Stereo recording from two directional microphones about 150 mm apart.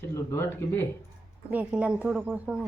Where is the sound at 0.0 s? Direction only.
20° left (ahead or behind).